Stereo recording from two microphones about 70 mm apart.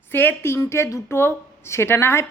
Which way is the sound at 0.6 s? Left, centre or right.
Left.